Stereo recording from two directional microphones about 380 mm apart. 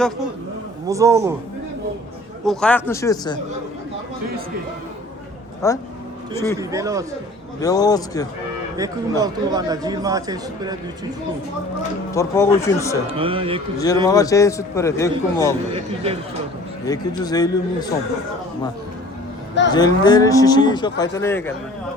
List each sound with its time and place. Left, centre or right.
0.9 s speech: centre
2.4 s speech: centre
5.6 s a man's voice: centre
6.6 s speech: centre
7.6 s a man's voice: centre
8.7 s speech: centre
12.1 s a man's voice: centre
13.1 s speech: centre
13.7 s a man's voice: centre
16.8 s a man's voice: centre
19.7 s a man's voice: centre